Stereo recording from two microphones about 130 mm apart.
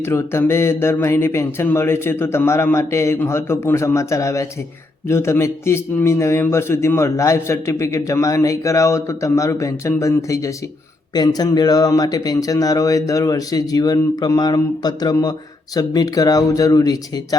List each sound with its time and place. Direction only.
0.0 s speech: 20° left (ahead or behind)